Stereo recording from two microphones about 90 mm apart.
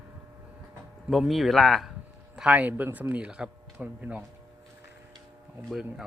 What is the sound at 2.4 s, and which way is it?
Speech, 15° right (ahead or behind).